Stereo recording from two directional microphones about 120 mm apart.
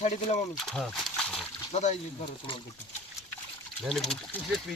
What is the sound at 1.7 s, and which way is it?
Speech, 75° left (ahead or behind).